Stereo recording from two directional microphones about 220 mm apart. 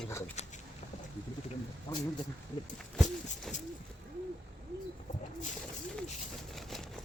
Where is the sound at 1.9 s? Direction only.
15° left (ahead or behind).